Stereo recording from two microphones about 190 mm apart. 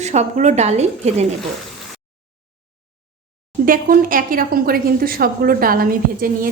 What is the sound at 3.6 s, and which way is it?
A woman's voice, 45° right (ahead or behind).